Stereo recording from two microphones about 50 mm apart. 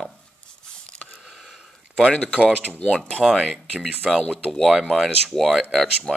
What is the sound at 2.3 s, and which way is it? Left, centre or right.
Speech, left.